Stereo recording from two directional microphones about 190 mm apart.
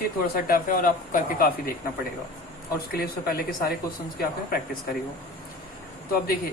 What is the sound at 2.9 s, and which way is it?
Speech, 50° left (ahead or behind).